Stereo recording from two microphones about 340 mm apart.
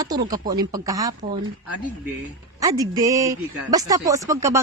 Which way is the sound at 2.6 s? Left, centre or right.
Centre.